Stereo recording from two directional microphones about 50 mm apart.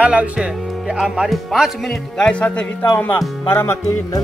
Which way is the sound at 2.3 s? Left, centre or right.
Left.